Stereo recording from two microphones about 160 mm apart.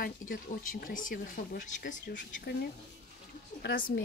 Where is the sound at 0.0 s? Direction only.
60° left (ahead or behind).